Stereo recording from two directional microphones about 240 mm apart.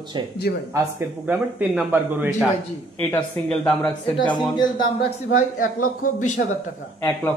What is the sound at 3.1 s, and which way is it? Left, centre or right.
Speech, centre.